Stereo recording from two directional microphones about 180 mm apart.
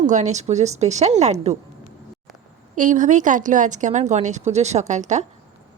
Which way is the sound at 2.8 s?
45° right (ahead or behind).